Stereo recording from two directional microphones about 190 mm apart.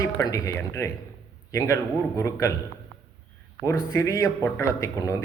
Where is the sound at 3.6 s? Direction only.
15° left (ahead or behind).